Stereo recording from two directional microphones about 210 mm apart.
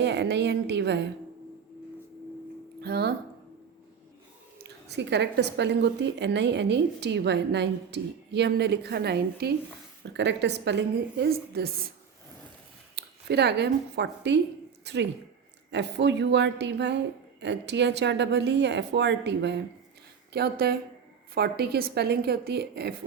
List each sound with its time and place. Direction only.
0.0 s speech: 55° right (ahead or behind)
2.8 s a woman's voice: 50° right (ahead or behind)
4.5 s a woman's voice: 55° right (ahead or behind)
13.0 s speech: 50° right (ahead or behind)
15.7 s a woman's voice: 55° right (ahead or behind)